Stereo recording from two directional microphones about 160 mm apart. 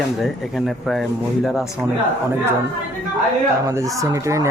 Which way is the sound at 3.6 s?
20° right (ahead or behind).